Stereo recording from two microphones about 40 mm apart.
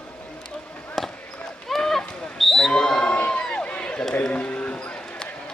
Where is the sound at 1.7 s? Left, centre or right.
Centre.